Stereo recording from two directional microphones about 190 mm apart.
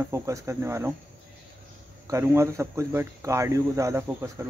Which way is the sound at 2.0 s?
15° right (ahead or behind).